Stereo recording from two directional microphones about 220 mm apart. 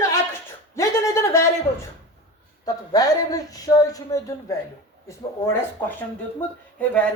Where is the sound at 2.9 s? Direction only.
15° left (ahead or behind).